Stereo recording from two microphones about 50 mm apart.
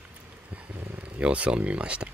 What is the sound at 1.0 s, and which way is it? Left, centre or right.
Speech, right.